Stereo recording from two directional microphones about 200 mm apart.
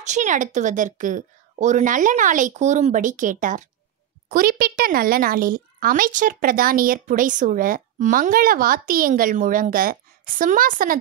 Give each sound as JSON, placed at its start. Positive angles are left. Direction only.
{"t": 0.0, "sound": "a woman's voice", "side_deg": -35}